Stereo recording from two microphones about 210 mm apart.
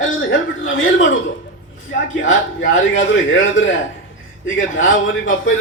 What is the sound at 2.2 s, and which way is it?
A man's voice, 65° left (ahead or behind).